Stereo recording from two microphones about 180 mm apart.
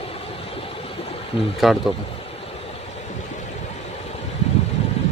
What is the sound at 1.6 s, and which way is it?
Speech, centre (ahead or behind).